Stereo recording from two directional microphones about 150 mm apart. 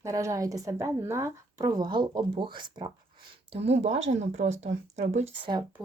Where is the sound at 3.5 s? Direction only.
45° right (ahead or behind).